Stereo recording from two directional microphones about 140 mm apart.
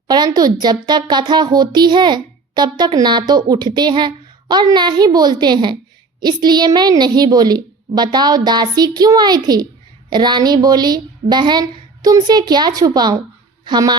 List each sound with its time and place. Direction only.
0.1 s a woman's voice: 30° right (ahead or behind)